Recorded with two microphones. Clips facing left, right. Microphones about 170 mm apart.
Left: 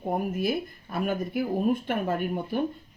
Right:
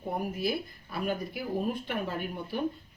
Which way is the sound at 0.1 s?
50° left (ahead or behind).